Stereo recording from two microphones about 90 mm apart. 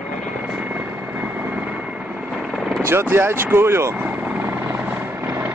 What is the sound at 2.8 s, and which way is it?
Speech, 30° right (ahead or behind).